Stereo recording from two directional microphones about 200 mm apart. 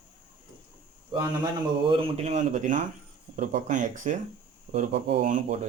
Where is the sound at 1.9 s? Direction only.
30° right (ahead or behind).